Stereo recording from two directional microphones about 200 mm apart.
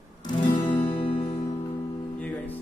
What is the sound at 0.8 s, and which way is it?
Music, 25° left (ahead or behind).